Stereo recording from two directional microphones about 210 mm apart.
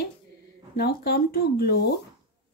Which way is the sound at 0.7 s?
50° left (ahead or behind).